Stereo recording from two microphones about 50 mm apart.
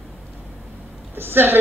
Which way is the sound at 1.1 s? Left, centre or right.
Right.